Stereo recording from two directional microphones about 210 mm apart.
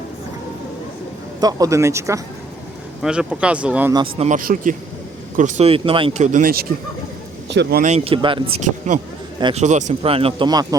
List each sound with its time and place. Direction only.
1.4 s speech: 15° right (ahead or behind)
3.9 s speech: 25° right (ahead or behind)
4.3 s speech: 40° right (ahead or behind)
7.9 s speech: 30° right (ahead or behind)